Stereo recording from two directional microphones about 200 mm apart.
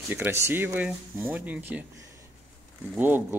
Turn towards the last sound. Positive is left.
turn(degrees=-10)  # may be behind; listen again after turning